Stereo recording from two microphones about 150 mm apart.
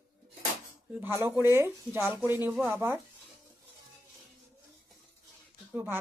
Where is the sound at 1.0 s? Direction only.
15° right (ahead or behind).